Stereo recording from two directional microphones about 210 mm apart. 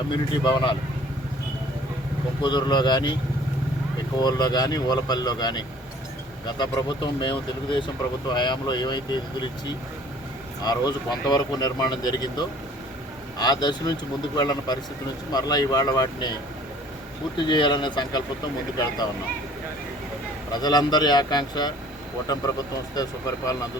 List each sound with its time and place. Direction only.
0.1 s speech: 20° left (ahead or behind)
2.4 s speech: 20° left (ahead or behind)
4.2 s speech: 20° left (ahead or behind)
10.6 s speech: 20° left (ahead or behind)
17.3 s speech: 20° left (ahead or behind)
20.5 s speech: 20° left (ahead or behind)